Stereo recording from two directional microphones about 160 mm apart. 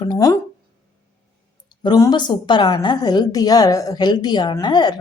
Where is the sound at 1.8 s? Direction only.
25° left (ahead or behind).